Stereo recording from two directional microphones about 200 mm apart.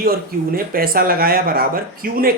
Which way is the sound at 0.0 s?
45° right (ahead or behind).